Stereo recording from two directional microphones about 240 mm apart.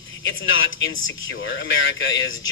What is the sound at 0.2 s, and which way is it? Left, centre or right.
Speech, left.